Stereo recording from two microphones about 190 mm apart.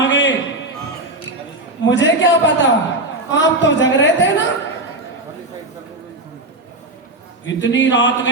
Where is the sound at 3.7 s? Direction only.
70° left (ahead or behind).